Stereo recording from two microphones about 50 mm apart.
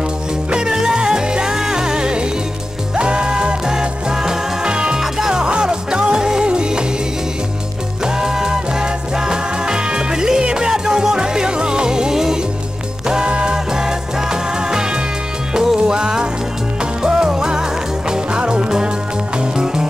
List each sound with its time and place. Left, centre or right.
0.5 s music: centre
8.0 s music: centre